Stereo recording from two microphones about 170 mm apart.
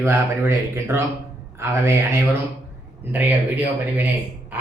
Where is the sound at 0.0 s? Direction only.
15° right (ahead or behind).